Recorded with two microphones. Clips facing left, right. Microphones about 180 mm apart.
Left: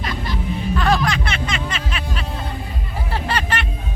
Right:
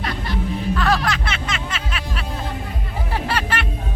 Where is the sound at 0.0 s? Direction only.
65° right (ahead or behind).